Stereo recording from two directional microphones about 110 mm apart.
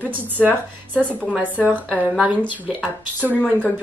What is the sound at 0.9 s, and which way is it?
A woman's voice, 15° right (ahead or behind).